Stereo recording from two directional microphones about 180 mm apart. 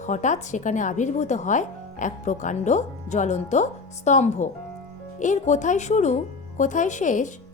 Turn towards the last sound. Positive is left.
turn(degrees=45)  # may be behind; listen again after turning